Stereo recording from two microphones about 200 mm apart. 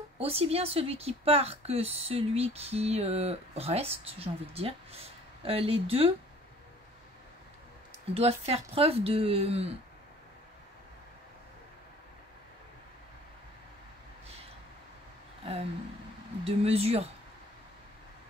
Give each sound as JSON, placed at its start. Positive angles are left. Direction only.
{"t": 0.2, "sound": "a woman's voice", "side_deg": -30}
{"t": 8.1, "sound": "a woman's voice", "side_deg": -30}
{"t": 16.4, "sound": "a woman's voice", "side_deg": -30}